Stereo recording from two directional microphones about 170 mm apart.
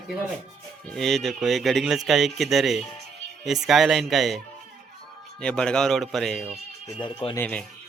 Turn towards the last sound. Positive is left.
turn(degrees=10)  # may be behind; listen again after turning